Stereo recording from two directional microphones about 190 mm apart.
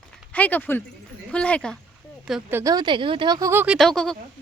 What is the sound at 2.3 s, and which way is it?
Speech, 10° right (ahead or behind).